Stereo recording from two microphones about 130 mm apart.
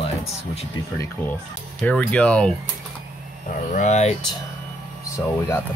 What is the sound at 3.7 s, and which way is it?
Speech, 65° left (ahead or behind).